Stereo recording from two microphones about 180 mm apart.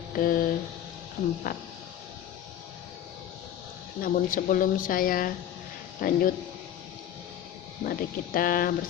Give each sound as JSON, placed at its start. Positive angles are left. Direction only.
{"t": 0.2, "sound": "a sound", "side_deg": 50}
{"t": 1.2, "sound": "speech", "side_deg": 60}
{"t": 4.0, "sound": "speech", "side_deg": 50}
{"t": 7.9, "sound": "speech", "side_deg": 50}